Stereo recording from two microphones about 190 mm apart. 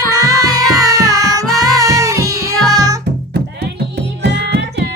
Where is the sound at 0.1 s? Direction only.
20° right (ahead or behind).